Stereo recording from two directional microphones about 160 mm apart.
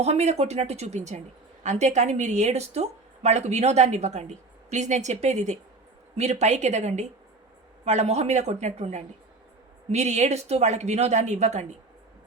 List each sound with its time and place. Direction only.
0.0 s a woman's voice: 45° right (ahead or behind)